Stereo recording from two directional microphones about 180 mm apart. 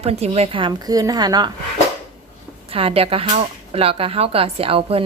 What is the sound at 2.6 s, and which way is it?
Speech, 35° right (ahead or behind).